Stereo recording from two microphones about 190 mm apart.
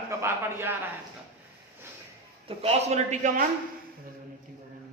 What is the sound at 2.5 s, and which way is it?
Speech, 30° right (ahead or behind).